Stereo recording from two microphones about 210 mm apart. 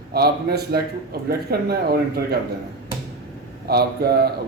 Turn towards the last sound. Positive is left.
turn(degrees=-50)  # may be behind; listen again after turning